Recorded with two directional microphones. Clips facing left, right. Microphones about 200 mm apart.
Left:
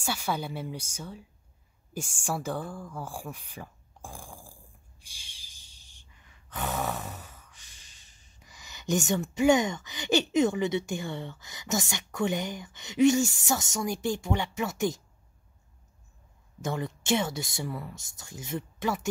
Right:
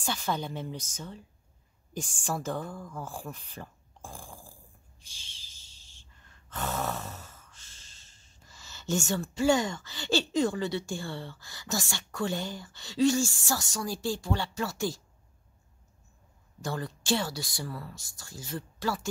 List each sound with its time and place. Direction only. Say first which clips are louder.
0.0 s speech: left 1 dB; 10° left (ahead or behind)
5.0 s a sound: right 1 dB; 10° left (ahead or behind)
16.6 s speech: left 2 dB; 20° left (ahead or behind)